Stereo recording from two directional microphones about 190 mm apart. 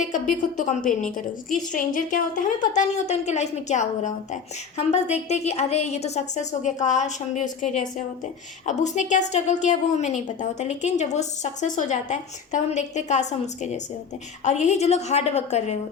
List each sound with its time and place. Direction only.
0.5 s a woman's voice: 40° left (ahead or behind)